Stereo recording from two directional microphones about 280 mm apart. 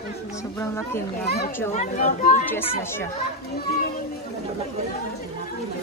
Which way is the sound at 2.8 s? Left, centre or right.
Centre.